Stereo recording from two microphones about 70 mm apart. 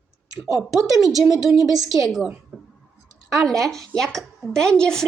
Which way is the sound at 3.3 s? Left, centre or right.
Centre.